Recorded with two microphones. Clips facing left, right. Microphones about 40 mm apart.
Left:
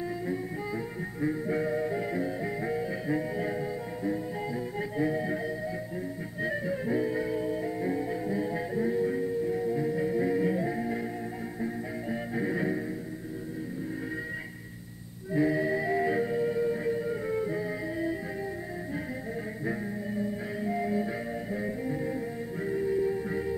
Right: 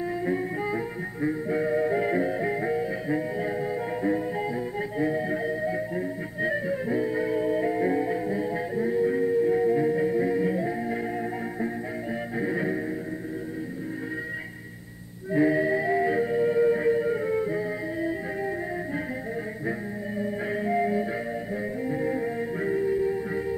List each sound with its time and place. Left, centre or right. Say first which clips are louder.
1.2 s music: right 3 dB; centre
4.9 s music: right 2 dB; centre
6.4 s music: right 4 dB; centre
15.3 s music: right 4 dB; centre
20.2 s music: right 7 dB; right